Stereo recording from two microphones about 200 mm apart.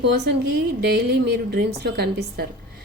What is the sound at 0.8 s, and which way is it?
A woman's voice, 55° right (ahead or behind).